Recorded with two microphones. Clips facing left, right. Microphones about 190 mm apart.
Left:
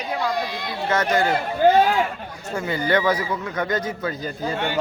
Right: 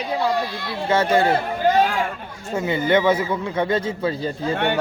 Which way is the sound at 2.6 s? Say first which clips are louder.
Right 3 dB; 25° right (ahead or behind).